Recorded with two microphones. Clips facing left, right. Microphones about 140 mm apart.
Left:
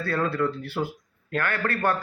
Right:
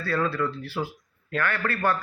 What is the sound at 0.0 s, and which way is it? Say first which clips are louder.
A man's voice: left 1 dB; 50° left (ahead or behind).